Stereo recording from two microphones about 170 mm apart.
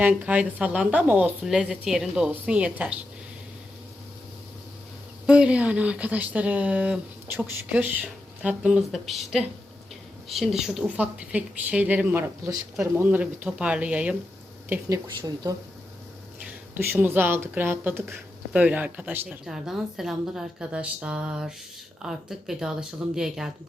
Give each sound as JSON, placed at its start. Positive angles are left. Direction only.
{"t": 0.0, "sound": "speech", "side_deg": -10}
{"t": 5.2, "sound": "speech", "side_deg": -5}
{"t": 14.7, "sound": "speech", "side_deg": -20}
{"t": 16.7, "sound": "speech", "side_deg": -10}